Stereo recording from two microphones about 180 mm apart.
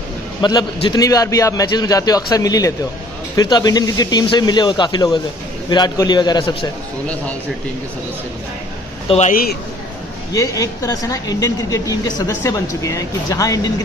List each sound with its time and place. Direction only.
0.4 s a man's voice: 20° left (ahead or behind)
9.0 s a man's voice: 35° left (ahead or behind)
9.3 s a man's voice: 55° left (ahead or behind)
10.3 s speech: 20° left (ahead or behind)